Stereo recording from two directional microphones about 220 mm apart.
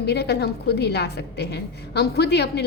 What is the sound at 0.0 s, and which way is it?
A woman's voice, 50° left (ahead or behind).